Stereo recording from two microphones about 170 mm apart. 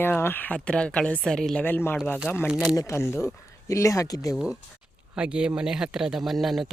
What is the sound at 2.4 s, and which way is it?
Speech, 5° right (ahead or behind).